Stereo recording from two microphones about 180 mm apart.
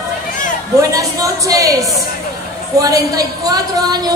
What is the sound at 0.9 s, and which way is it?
A woman's voice, 20° right (ahead or behind).